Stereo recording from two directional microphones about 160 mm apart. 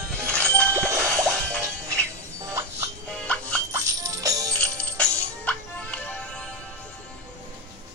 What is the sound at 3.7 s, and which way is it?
Music, 20° right (ahead or behind).